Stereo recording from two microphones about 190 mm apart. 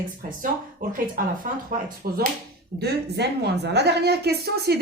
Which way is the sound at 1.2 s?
50° right (ahead or behind).